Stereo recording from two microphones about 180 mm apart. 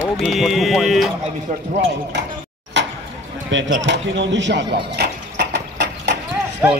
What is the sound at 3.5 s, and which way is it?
Speech, 90° right.